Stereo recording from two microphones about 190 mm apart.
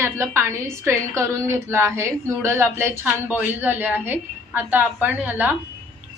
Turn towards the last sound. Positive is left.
turn(degrees=-10)  # may be behind; listen again after turning